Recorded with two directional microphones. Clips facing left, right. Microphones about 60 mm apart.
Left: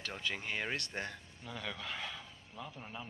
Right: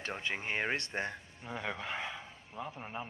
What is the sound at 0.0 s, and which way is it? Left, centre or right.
A man's voice, right.